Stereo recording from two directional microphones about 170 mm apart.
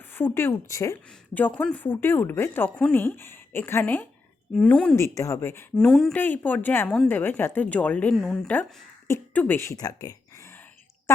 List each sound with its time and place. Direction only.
0.1 s a woman's voice: 15° left (ahead or behind)
5.0 s a woman's voice: 20° left (ahead or behind)